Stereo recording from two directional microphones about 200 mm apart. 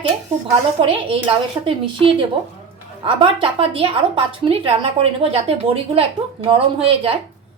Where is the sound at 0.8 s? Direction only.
25° right (ahead or behind).